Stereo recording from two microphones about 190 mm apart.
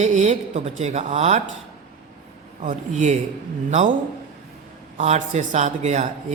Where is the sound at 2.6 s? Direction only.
40° right (ahead or behind).